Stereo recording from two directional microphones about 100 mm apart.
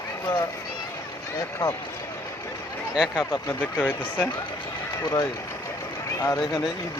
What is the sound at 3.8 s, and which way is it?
Speech, 20° left (ahead or behind).